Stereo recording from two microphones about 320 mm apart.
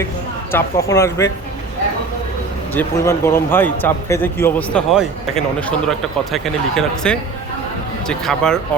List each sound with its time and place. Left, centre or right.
0.5 s speech: centre
2.7 s speech: centre